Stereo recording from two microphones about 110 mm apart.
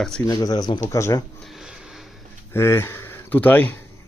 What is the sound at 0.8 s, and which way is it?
Speech, 25° left (ahead or behind).